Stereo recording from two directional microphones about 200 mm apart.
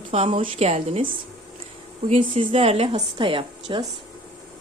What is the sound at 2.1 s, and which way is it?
A woman's voice, 30° right (ahead or behind).